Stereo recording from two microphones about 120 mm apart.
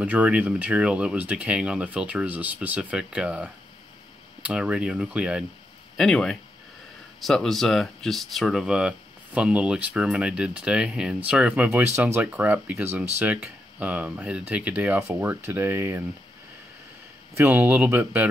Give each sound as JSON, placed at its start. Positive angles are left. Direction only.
{"t": 0.0, "sound": "speech", "side_deg": -10}
{"t": 5.9, "sound": "speech", "side_deg": 5}
{"t": 17.4, "sound": "speech", "side_deg": -15}